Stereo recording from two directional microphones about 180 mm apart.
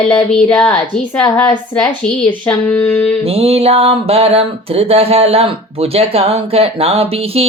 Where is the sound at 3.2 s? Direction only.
35° right (ahead or behind).